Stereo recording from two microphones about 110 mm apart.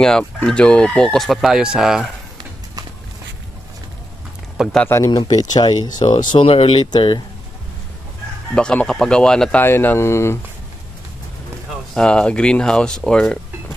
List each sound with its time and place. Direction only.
0.0 s speech: 5° left (ahead or behind)
4.5 s speech: 5° right (ahead or behind)
4.9 s speech: 25° left (ahead or behind)
5.1 s speech: 40° left (ahead or behind)
6.4 s speech: 60° left (ahead or behind)
6.9 s speech: 40° left (ahead or behind)
8.5 s speech: 10° left (ahead or behind)
9.6 s speech: 20° left (ahead or behind)
11.9 s speech: 10° left (ahead or behind)